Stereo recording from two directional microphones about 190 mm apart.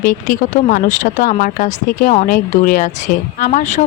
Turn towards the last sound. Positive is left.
turn(degrees=40)  # may be behind; listen again after turning